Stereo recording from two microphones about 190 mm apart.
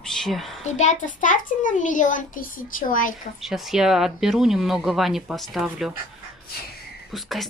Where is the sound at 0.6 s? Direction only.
40° left (ahead or behind).